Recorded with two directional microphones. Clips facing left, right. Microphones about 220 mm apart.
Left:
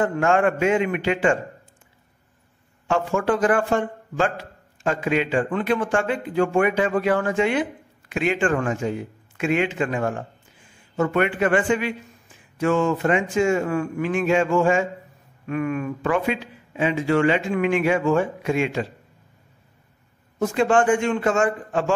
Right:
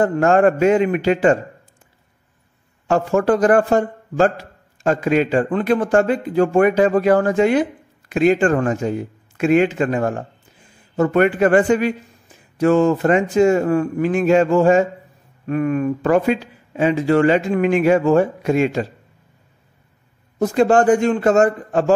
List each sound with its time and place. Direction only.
0.0 s a man's voice: 40° right (ahead or behind)
2.9 s a man's voice: 40° right (ahead or behind)
20.3 s a man's voice: 40° right (ahead or behind)